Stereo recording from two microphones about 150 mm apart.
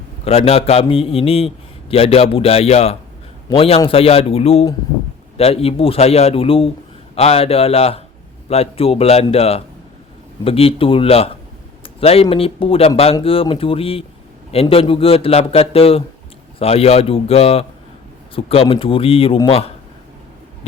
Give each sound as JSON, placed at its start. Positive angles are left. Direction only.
{"t": 0.3, "sound": "a man's voice", "side_deg": 40}